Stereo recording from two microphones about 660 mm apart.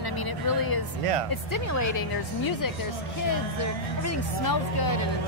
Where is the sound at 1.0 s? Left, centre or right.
Right.